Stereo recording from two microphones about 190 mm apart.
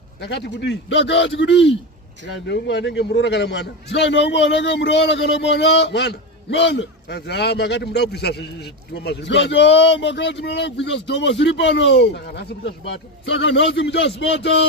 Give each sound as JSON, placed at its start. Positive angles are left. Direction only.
{"t": 0.2, "sound": "a man's voice", "side_deg": 65}